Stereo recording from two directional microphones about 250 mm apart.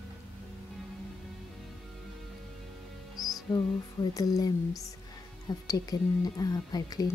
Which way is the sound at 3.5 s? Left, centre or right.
Centre.